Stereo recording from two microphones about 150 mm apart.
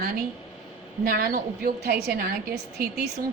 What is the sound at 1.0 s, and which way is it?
A woman's voice, 80° right.